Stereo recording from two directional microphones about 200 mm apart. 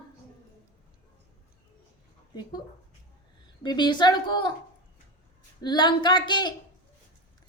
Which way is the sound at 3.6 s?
20° left (ahead or behind).